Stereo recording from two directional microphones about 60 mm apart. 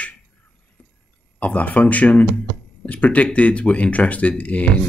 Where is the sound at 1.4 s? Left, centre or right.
Left.